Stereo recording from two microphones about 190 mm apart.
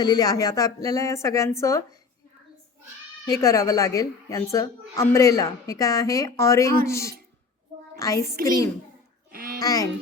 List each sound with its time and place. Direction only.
0.0 s a woman's voice: 20° left (ahead or behind)
3.2 s a woman's voice: 15° left (ahead or behind)
7.9 s child singing: 15° left (ahead or behind)
9.3 s music: 50° right (ahead or behind)
9.6 s a child's voice: 20° left (ahead or behind)